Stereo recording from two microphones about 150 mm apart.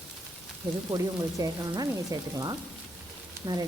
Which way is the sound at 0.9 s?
25° right (ahead or behind).